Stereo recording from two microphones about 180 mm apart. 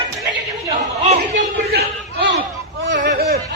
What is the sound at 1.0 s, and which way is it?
Speech, 40° right (ahead or behind).